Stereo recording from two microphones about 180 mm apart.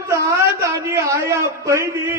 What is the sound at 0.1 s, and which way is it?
A man's voice, 15° right (ahead or behind).